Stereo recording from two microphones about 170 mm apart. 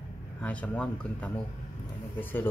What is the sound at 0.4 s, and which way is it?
Speech, 10° left (ahead or behind).